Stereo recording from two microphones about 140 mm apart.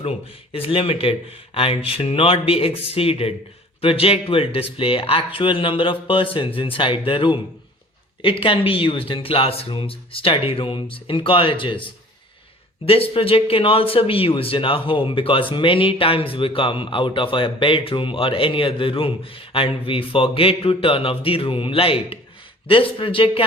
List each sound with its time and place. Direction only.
0.5 s speech: 40° left (ahead or behind)
12.8 s speech: 40° left (ahead or behind)